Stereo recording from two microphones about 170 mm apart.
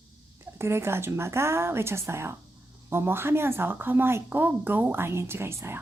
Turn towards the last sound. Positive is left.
turn(degrees=-15)  # may be behind; listen again after turning